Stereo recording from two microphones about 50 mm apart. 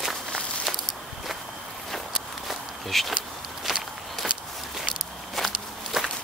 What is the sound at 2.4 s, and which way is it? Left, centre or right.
Walk, centre.